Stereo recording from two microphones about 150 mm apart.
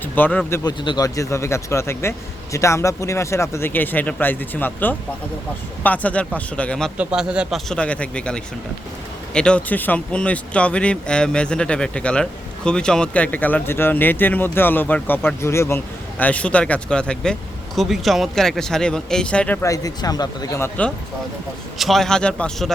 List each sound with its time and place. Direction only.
0.0 s a man's voice: 10° left (ahead or behind)
0.6 s speech: 25° left (ahead or behind); by 6.9 s 5° left (ahead or behind)
6.9 s speech: 5° right (ahead or behind)
7.7 s speech: 10° left (ahead or behind)
19.6 s speech: 25° left (ahead or behind)
20.6 s speech: 10° left (ahead or behind)